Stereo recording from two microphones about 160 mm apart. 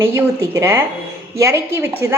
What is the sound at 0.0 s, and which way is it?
A woman's voice, 15° right (ahead or behind).